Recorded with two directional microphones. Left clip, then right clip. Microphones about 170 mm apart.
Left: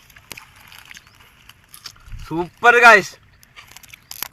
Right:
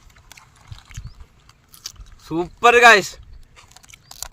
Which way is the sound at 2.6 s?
35° right (ahead or behind).